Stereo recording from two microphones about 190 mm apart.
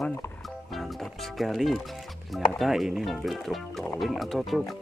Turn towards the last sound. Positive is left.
turn(degrees=0)  # may be behind; listen again after turning